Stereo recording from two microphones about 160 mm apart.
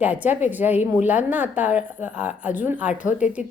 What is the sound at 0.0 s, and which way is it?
A woman's voice, 10° right (ahead or behind).